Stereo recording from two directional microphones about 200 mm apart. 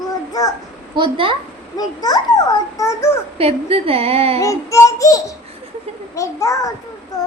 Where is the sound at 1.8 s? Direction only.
20° left (ahead or behind).